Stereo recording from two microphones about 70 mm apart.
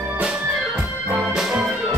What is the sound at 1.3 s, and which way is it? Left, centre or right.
Music, centre.